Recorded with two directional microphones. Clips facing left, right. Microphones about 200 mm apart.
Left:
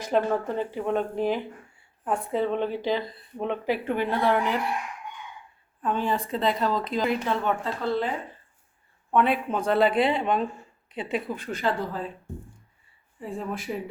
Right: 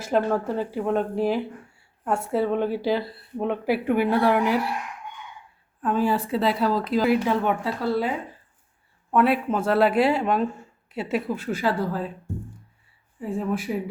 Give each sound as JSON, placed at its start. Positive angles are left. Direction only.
{"t": 0.0, "sound": "speech", "side_deg": -5}
{"t": 5.8, "sound": "speech", "side_deg": -5}
{"t": 13.1, "sound": "speech", "side_deg": 0}